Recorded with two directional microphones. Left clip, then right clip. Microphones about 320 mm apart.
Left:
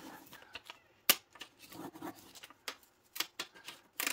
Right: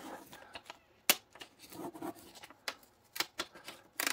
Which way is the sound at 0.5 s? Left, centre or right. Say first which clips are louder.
Left 2 dB; centre.